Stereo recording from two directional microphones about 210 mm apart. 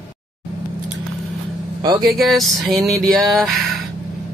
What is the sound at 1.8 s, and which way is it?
Speech, 15° right (ahead or behind).